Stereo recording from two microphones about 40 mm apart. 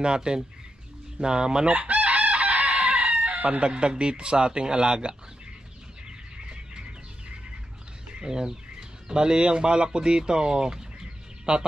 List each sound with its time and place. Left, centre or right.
0.0 s speech: right
1.7 s chicken: right
3.6 s speech: right
6.0 s bird: right
8.2 s speech: centre